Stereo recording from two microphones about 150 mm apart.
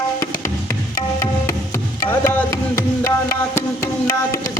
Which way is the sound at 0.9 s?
20° left (ahead or behind).